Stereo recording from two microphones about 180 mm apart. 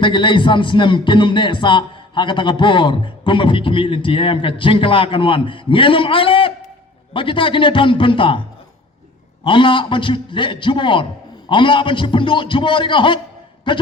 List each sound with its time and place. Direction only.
0.0 s speech: 25° left (ahead or behind)
9.4 s speech: 25° left (ahead or behind)